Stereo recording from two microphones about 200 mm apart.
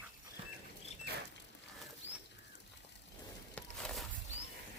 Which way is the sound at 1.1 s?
55° right (ahead or behind).